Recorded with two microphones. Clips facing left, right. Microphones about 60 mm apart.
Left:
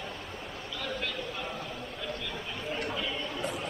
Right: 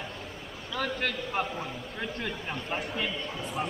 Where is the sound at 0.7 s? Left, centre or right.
Right.